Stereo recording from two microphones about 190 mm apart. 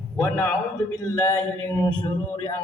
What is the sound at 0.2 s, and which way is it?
A man's voice, 15° left (ahead or behind).